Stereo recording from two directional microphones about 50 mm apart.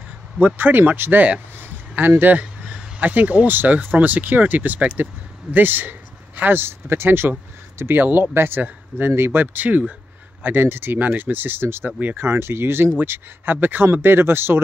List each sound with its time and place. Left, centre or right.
0.6 s speech: right
1.6 s a sound: right
3.0 s speech: right
10.4 s speech: right